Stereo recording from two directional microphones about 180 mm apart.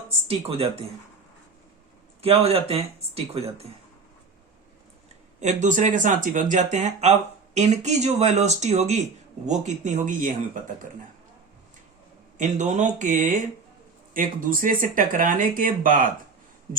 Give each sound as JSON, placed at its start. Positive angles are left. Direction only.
{"t": 0.3, "sound": "speech", "side_deg": -35}
{"t": 2.2, "sound": "speech", "side_deg": -35}
{"t": 5.4, "sound": "speech", "side_deg": -40}
{"t": 12.4, "sound": "speech", "side_deg": -40}